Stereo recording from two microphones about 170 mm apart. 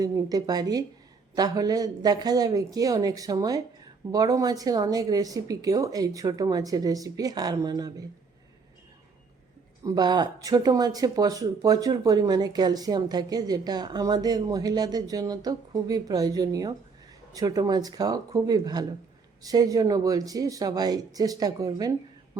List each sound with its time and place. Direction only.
0.0 s speech: 20° right (ahead or behind)
9.8 s speech: 25° right (ahead or behind)